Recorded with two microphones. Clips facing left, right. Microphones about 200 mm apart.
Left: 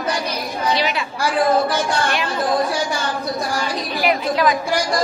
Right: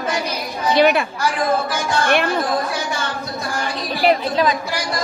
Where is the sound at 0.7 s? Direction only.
55° right (ahead or behind).